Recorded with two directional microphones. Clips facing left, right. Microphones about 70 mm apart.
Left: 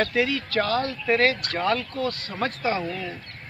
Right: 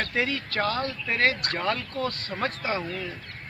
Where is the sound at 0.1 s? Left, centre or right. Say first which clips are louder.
Left 4 dB; right.